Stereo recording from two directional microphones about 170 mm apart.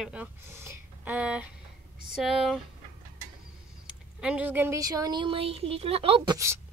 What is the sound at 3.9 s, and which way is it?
Speech, 5° right (ahead or behind).